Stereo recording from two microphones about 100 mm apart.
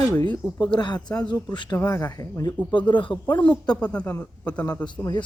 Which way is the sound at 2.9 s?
55° left (ahead or behind).